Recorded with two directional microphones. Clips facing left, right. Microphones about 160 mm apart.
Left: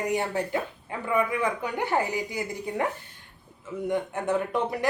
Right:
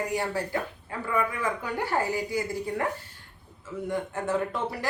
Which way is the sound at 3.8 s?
20° left (ahead or behind).